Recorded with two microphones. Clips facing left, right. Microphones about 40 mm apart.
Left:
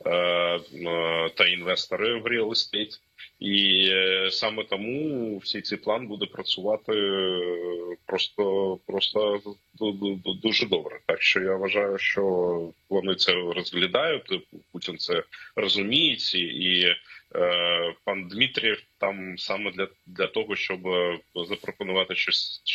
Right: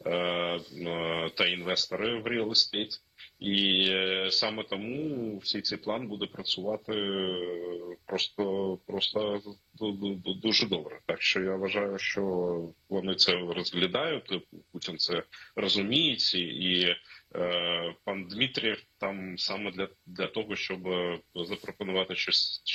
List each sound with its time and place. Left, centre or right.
0.0 s a sound: left
3.4 s speech: left
21.3 s speech: left